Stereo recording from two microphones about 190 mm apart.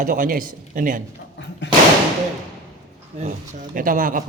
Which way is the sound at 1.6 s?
70° left (ahead or behind).